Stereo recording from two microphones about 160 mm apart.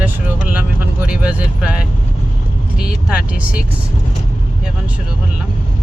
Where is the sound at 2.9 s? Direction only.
5° right (ahead or behind).